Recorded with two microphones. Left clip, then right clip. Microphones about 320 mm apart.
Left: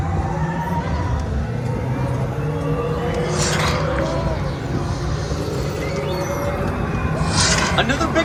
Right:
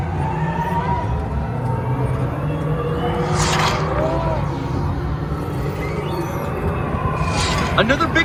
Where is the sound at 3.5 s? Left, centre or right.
Right.